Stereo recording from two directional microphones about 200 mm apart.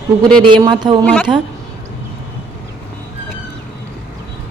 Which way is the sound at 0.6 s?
20° right (ahead or behind).